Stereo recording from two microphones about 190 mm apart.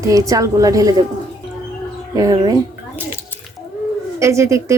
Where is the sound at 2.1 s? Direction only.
20° right (ahead or behind).